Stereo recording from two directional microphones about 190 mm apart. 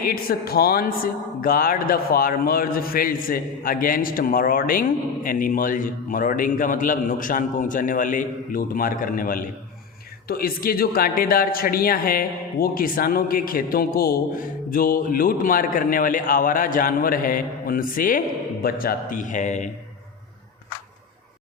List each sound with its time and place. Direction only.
0.0 s a man's voice: 50° left (ahead or behind)